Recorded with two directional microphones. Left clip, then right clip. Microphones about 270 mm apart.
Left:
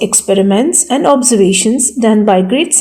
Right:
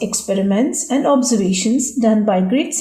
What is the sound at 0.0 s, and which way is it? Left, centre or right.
Speech, left.